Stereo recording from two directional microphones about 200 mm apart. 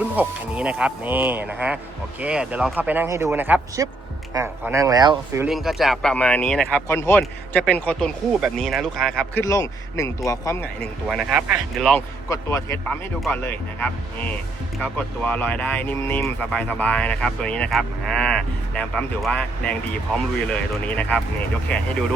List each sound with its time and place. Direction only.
0.0 s speech: 5° right (ahead or behind)
5.5 s speech: centre (ahead or behind)
9.5 s speech: 15° left (ahead or behind)
11.1 s speech: 5° right (ahead or behind)
12.3 s speech: 15° left (ahead or behind)